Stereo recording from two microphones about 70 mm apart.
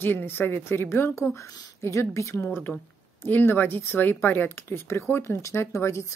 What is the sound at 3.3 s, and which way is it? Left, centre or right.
A woman's voice, left.